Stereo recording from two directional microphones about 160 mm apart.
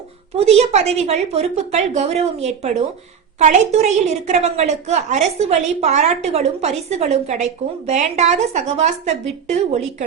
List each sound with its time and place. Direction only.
0.3 s a woman's voice: 40° right (ahead or behind)